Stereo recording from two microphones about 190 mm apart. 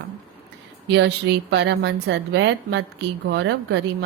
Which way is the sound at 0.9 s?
65° right (ahead or behind).